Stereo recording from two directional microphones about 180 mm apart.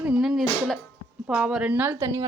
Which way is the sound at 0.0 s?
5° right (ahead or behind).